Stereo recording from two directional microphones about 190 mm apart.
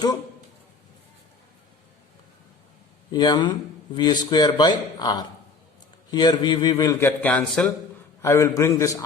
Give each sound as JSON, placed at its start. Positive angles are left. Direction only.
{"t": 3.1, "sound": "speech", "side_deg": 20}
{"t": 7.2, "sound": "a man's voice", "side_deg": 5}